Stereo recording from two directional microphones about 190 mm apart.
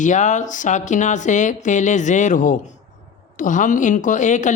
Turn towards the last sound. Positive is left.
turn(degrees=40)  # may be behind; listen again after turning